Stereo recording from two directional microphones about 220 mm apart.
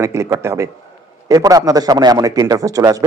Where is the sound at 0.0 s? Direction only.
15° right (ahead or behind).